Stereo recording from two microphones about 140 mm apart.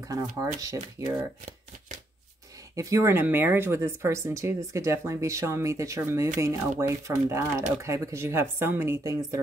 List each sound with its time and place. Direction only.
0.1 s speech: 25° right (ahead or behind)
2.7 s speech: 20° right (ahead or behind)